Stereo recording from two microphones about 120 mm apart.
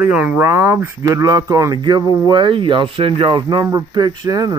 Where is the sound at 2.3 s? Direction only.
45° right (ahead or behind).